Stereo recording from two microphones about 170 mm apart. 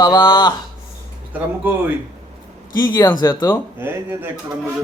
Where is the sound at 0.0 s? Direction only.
25° left (ahead or behind).